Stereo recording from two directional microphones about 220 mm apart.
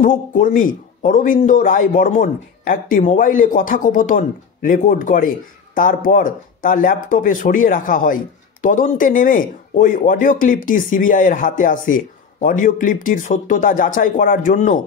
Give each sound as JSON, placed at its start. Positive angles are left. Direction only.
{"t": 0.0, "sound": "speech", "side_deg": 40}